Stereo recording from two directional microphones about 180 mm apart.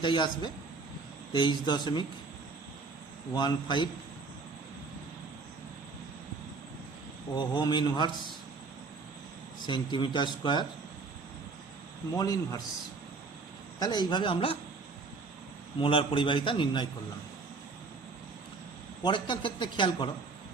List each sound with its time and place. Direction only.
0.0 s a man's voice: 25° left (ahead or behind)
3.3 s a man's voice: 25° left (ahead or behind)
7.3 s a man's voice: 25° left (ahead or behind)
9.6 s a man's voice: 25° left (ahead or behind)
12.1 s a man's voice: 20° left (ahead or behind)
13.7 s a man's voice: 20° left (ahead or behind)
15.8 s a man's voice: 30° left (ahead or behind)
19.0 s a man's voice: 25° left (ahead or behind)